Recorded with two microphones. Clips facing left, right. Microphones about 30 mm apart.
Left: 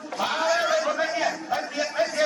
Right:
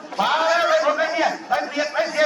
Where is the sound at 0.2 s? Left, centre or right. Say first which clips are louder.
Right 5 dB; right.